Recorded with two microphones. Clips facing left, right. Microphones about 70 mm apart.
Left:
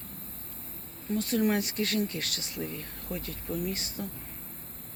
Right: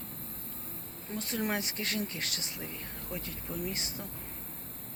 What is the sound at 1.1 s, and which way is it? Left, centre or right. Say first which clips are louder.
Speech: left 7 dB; right.